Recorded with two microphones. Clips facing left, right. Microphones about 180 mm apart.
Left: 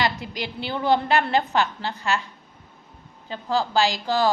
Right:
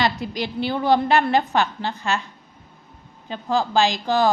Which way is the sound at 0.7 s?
15° right (ahead or behind).